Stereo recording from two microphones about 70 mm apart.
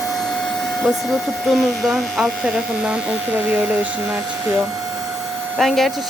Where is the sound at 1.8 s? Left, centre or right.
Centre.